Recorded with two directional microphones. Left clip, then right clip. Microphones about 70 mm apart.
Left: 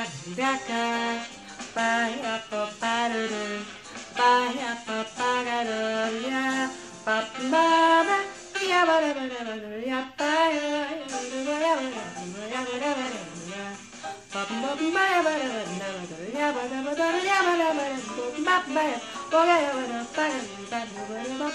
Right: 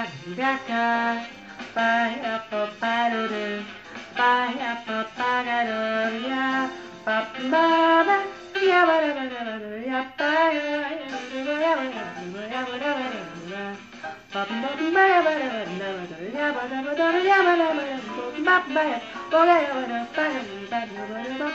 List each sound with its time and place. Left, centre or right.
0.0 s music: left
14.3 s speech: left